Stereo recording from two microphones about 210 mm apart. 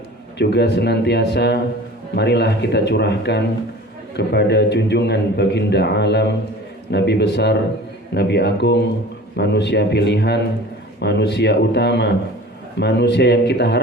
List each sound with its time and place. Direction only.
0.3 s a man's voice: 55° left (ahead or behind)